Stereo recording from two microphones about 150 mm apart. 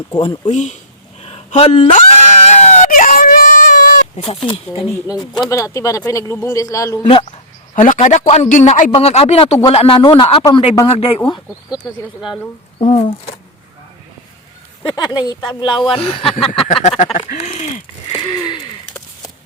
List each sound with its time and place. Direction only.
0.1 s speech: 30° left (ahead or behind)
0.5 s speech: 50° left (ahead or behind)
1.2 s a sound: 45° left (ahead or behind)
2.9 s whimper: 60° left (ahead or behind)
4.4 s speech: 35° left (ahead or behind); by 7.0 s 20° left (ahead or behind)
7.0 s speech: 35° left (ahead or behind)
7.9 s speech: 55° left (ahead or behind)
12.8 s speech: 45° left (ahead or behind)
14.8 s speech: 30° left (ahead or behind); by 17.8 s 55° left (ahead or behind)
18.1 s a sound: 30° left (ahead or behind)